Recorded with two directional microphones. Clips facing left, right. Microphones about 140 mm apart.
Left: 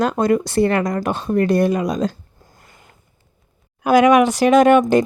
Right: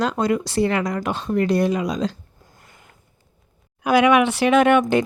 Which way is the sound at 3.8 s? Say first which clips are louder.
Left 3 dB; 45° left (ahead or behind).